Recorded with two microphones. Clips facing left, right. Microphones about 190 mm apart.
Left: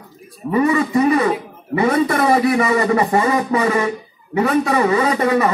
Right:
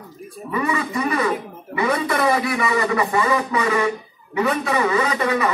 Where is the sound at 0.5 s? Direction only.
40° left (ahead or behind).